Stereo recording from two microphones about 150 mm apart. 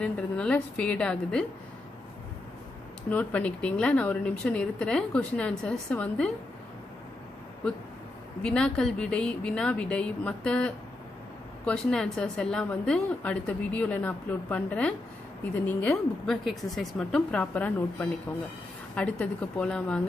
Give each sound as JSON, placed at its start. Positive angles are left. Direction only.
{"t": 0.0, "sound": "a woman's voice", "side_deg": 5}
{"t": 3.1, "sound": "a woman's voice", "side_deg": 10}
{"t": 8.4, "sound": "a woman's voice", "side_deg": 5}